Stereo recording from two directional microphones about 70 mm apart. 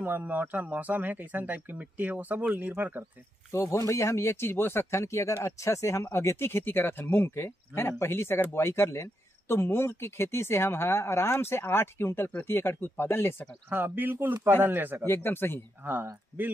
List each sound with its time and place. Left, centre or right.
0.0 s speech: right
3.5 s speech: left
13.7 s speech: right
15.0 s speech: left
15.8 s speech: right